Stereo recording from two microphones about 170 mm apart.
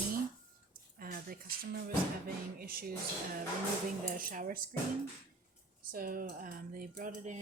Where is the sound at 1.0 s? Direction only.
60° right (ahead or behind).